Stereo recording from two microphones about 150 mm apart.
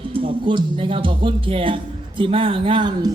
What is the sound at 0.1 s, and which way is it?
A woman's voice, 35° right (ahead or behind).